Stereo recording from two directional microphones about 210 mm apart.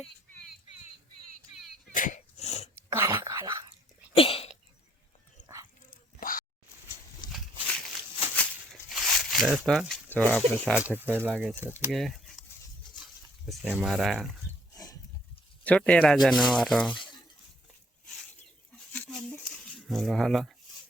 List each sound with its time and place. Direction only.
1.9 s sneeze: 40° left (ahead or behind)
2.7 s dog: 10° right (ahead or behind)
4.1 s sneeze: 25° left (ahead or behind)
5.4 s dog: 40° left (ahead or behind)
5.9 s drip: 40° left (ahead or behind)
7.2 s walk: 20° left (ahead or behind)
7.7 s a sound: centre (ahead or behind)
10.7 s speech: 5° right (ahead or behind)
11.9 s a sound: centre (ahead or behind)
13.4 s speech: centre (ahead or behind)
14.7 s a sound: 15° left (ahead or behind)
15.6 s speech: 5° left (ahead or behind)
18.7 s a sound: centre (ahead or behind)